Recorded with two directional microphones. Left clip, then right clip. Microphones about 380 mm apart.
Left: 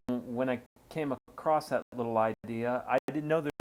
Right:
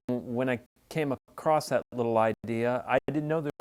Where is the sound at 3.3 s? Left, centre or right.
Right.